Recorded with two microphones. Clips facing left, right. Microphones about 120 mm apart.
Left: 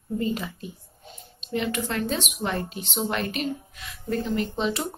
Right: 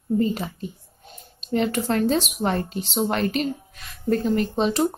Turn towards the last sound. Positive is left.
turn(degrees=-40)  # may be behind; listen again after turning